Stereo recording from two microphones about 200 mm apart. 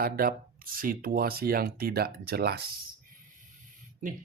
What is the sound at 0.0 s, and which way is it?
Speech, 45° right (ahead or behind).